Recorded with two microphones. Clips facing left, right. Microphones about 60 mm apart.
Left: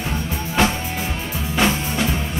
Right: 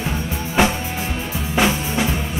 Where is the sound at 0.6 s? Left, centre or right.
Centre.